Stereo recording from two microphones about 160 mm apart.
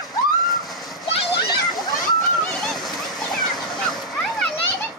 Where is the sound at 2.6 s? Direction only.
Centre (ahead or behind).